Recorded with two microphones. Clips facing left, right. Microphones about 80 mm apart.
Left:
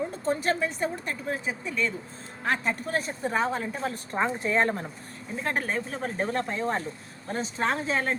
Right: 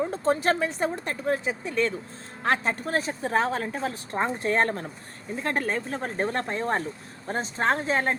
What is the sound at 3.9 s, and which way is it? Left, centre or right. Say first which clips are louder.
Speech: even; right.